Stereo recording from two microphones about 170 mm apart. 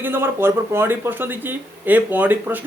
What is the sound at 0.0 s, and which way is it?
Speech, 15° right (ahead or behind).